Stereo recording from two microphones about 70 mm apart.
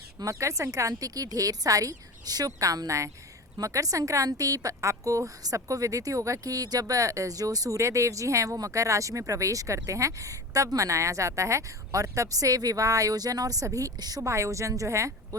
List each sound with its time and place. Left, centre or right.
0.2 s speech: right
7.8 s speech: right
14.2 s speech: right